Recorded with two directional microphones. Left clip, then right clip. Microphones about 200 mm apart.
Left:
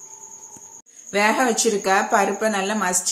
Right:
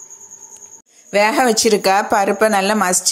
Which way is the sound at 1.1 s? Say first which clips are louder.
Right 5 dB; 40° right (ahead or behind).